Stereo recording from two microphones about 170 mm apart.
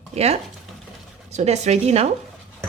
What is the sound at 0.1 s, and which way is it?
Speech, 40° right (ahead or behind).